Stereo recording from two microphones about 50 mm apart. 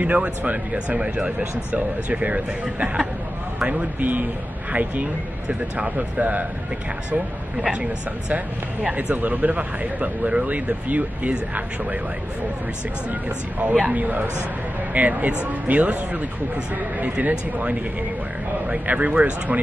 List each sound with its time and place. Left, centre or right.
0.0 s speech: right
5.5 s speech: right
7.7 s speech: right
13.1 s speech: right